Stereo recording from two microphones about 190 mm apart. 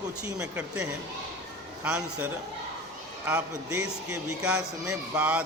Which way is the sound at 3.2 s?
10° right (ahead or behind).